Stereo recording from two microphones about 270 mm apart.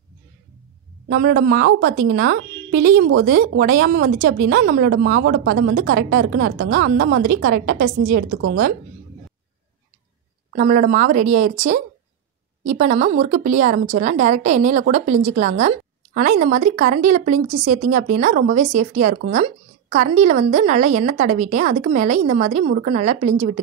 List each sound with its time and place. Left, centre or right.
1.0 s a woman's voice: right
10.5 s a woman's voice: right